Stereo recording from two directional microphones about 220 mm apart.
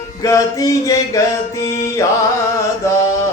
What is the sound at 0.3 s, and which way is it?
Mantra, 15° left (ahead or behind).